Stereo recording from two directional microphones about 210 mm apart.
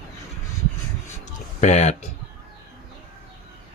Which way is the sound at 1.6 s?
35° left (ahead or behind).